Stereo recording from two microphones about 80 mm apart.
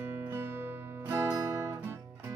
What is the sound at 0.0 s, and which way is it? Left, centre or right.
Music, right.